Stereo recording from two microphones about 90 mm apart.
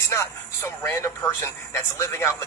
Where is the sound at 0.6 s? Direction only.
30° left (ahead or behind).